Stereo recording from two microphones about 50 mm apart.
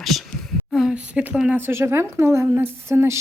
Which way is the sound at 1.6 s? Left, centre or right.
Right.